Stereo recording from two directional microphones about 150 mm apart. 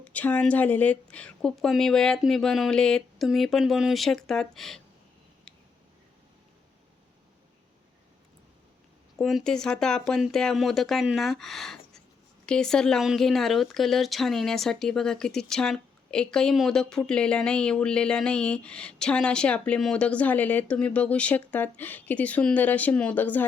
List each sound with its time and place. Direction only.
0.0 s speech: 10° left (ahead or behind)
9.1 s speech: 5° left (ahead or behind)